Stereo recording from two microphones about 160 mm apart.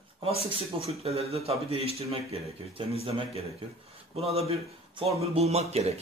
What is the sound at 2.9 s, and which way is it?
Speech, 40° right (ahead or behind).